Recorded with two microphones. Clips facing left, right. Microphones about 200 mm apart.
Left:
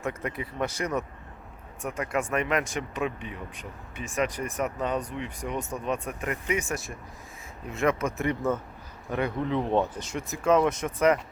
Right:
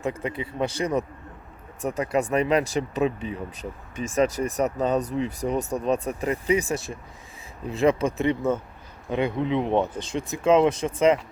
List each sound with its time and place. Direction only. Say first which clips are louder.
0.0 s speech: right 4 dB; 30° right (ahead or behind)
7.7 s speech: right 5 dB; 30° right (ahead or behind)
9.0 s speech: right 4 dB; 20° right (ahead or behind)